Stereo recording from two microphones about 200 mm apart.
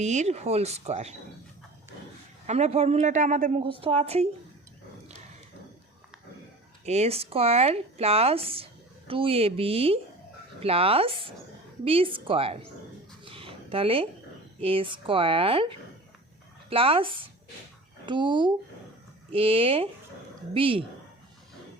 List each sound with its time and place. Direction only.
0.0 s speech: 35° right (ahead or behind)
2.5 s speech: 30° right (ahead or behind)
3.6 s speech: 25° right (ahead or behind)
6.8 s speech: 30° right (ahead or behind)
13.2 s a sound: 25° right (ahead or behind)
14.6 s speech: 25° right (ahead or behind)